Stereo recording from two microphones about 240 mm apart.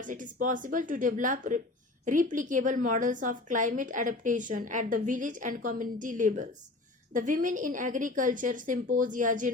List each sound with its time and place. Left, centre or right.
0.0 s a woman's voice: right